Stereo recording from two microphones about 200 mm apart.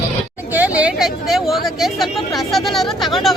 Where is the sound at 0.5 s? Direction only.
5° right (ahead or behind).